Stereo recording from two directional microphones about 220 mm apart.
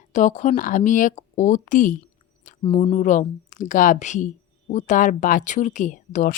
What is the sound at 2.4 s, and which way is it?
Speech, 25° left (ahead or behind).